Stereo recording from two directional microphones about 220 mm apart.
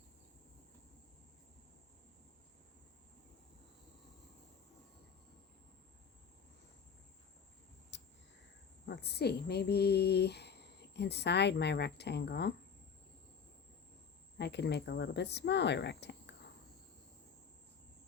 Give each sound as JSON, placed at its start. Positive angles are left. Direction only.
{"t": 7.9, "sound": "a sound", "side_deg": 55}
{"t": 8.9, "sound": "speech", "side_deg": 45}
{"t": 14.3, "sound": "speech", "side_deg": 50}